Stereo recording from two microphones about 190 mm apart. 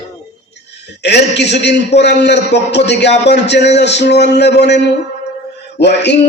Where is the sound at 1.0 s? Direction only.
65° left (ahead or behind).